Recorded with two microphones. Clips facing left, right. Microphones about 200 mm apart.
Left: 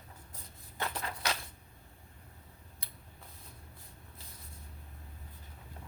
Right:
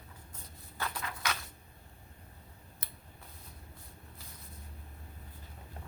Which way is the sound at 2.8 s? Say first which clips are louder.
Right 4 dB; 55° right (ahead or behind).